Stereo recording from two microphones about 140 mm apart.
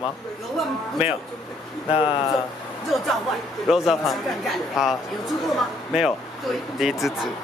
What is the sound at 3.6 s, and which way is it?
Speech, centre (ahead or behind).